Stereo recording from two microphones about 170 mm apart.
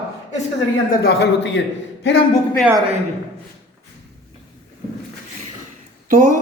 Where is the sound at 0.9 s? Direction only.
65° left (ahead or behind); by 1.6 s 85° left.